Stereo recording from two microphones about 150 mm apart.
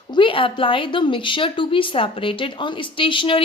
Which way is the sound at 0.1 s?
35° left (ahead or behind).